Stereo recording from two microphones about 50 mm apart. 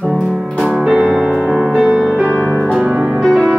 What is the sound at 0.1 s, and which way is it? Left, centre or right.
Music, centre.